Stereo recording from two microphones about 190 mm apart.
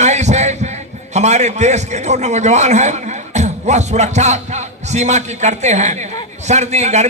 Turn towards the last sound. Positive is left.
turn(degrees=-35)  # may be behind; listen again after turning